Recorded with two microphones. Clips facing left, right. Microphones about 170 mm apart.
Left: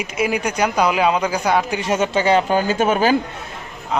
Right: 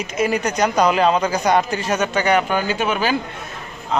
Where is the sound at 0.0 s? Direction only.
10° left (ahead or behind).